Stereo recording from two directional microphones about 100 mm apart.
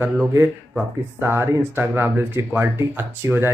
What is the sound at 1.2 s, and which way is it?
Speech, 25° right (ahead or behind).